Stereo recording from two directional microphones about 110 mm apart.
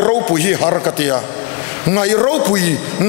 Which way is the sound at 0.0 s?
20° left (ahead or behind).